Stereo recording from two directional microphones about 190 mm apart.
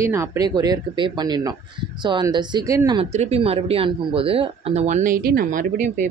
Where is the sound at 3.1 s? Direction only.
35° right (ahead or behind).